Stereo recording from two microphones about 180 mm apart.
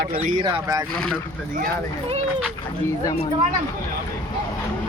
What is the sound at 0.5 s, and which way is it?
Speech, 20° right (ahead or behind).